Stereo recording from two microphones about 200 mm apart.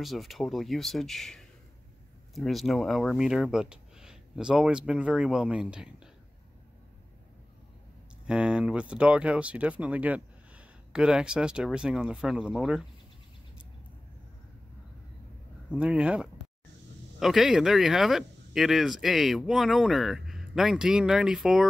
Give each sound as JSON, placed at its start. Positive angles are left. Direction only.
{"t": 0.0, "sound": "speech", "side_deg": 0}
{"t": 8.3, "sound": "speech", "side_deg": -5}
{"t": 15.7, "sound": "speech", "side_deg": -5}